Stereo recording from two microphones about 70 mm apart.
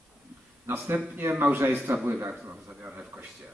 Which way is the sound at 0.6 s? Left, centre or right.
Right.